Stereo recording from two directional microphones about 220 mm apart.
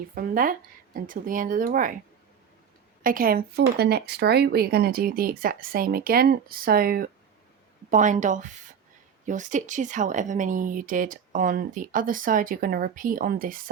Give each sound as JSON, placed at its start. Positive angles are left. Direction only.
{"t": 0.1, "sound": "a woman's voice", "side_deg": -40}
{"t": 3.0, "sound": "a woman's voice", "side_deg": -40}